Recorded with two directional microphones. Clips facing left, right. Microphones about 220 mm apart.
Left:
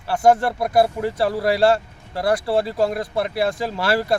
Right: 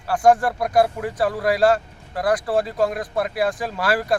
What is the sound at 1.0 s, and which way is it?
Speech, 25° left (ahead or behind).